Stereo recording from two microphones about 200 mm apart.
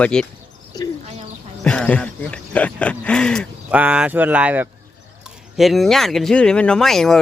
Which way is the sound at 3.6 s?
5° right (ahead or behind).